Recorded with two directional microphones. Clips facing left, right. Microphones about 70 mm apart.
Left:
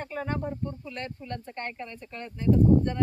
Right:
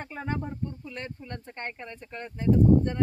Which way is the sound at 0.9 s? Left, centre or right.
Centre.